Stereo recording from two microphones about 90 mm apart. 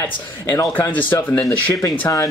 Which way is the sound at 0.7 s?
15° left (ahead or behind).